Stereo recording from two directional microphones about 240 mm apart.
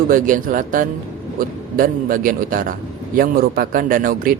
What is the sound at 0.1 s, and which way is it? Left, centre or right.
A man's voice, right.